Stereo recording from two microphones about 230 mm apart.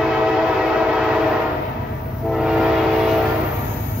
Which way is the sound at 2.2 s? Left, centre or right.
Centre.